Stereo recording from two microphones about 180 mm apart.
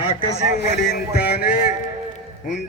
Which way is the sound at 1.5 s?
40° left (ahead or behind).